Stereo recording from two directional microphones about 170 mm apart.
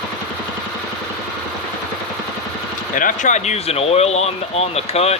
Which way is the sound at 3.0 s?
50° left (ahead or behind).